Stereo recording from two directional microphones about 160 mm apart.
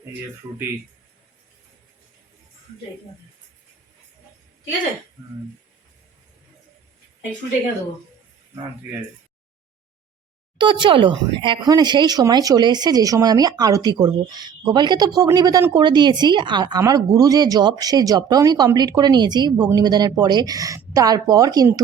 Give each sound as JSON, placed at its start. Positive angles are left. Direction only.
{"t": 5.2, "sound": "speech", "side_deg": -20}
{"t": 10.6, "sound": "speech", "side_deg": -30}